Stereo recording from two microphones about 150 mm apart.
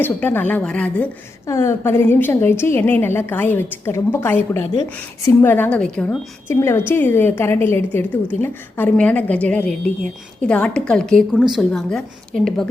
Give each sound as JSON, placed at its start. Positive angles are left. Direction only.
{"t": 0.0, "sound": "a woman's voice", "side_deg": 15}
{"t": 1.5, "sound": "a woman's voice", "side_deg": 20}
{"t": 6.5, "sound": "a woman's voice", "side_deg": 20}